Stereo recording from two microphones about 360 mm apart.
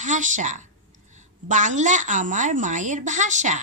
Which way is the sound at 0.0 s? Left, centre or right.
Right.